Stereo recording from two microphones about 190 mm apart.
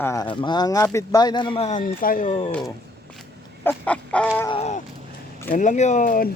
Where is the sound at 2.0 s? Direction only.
45° left (ahead or behind).